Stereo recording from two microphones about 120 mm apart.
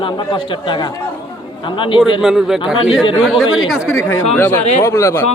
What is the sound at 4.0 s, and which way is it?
A man's voice, 20° left (ahead or behind).